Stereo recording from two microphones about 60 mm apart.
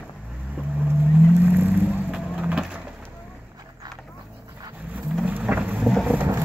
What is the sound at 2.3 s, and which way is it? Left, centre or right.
Wood, centre.